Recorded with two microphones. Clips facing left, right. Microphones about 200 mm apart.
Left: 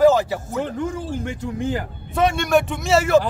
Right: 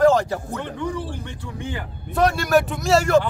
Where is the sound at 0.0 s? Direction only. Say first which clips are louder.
Left 1 dB; 5° left (ahead or behind).